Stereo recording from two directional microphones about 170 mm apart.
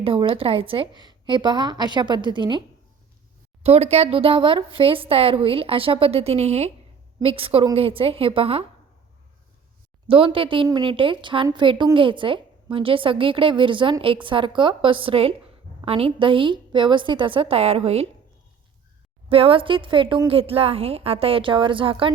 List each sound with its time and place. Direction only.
0.0 s a woman's voice: 30° right (ahead or behind)
3.6 s speech: 40° right (ahead or behind)
10.1 s a woman's voice: 30° right (ahead or behind)
19.3 s speech: 35° right (ahead or behind)